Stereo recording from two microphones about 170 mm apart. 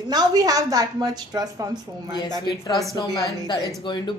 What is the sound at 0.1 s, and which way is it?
A woman's voice, 25° right (ahead or behind).